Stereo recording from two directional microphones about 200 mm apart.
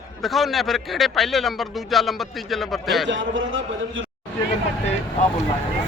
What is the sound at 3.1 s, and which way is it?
Speech, 70° right (ahead or behind).